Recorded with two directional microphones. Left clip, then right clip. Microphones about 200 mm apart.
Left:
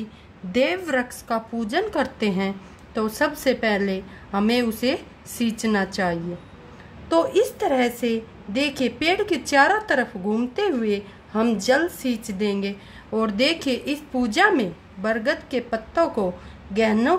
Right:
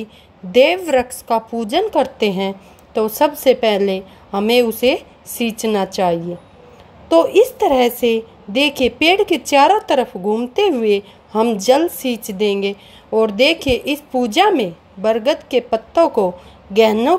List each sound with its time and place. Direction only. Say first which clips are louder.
0.5 s a woman's voice: right 9 dB; 25° right (ahead or behind)